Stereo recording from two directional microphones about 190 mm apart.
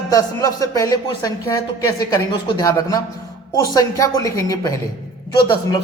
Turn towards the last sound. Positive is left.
turn(degrees=25)  # may be behind; listen again after turning